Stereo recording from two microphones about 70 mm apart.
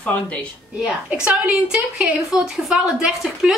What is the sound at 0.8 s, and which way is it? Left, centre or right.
A woman's voice, centre.